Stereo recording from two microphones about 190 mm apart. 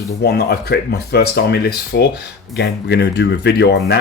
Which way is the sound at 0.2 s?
60° left (ahead or behind).